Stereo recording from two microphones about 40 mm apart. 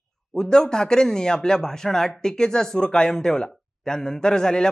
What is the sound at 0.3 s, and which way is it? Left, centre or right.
Speech, centre.